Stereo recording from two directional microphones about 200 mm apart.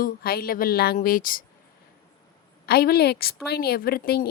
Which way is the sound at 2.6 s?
50° left (ahead or behind).